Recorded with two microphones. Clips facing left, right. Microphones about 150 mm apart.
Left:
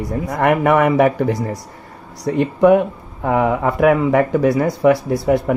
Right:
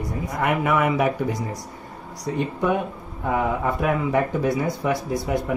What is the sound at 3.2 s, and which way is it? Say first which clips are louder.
Speech: left 6 dB; 70° left (ahead or behind).